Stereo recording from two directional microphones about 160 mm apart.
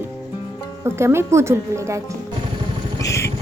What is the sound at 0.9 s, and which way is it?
A woman's voice, 15° right (ahead or behind).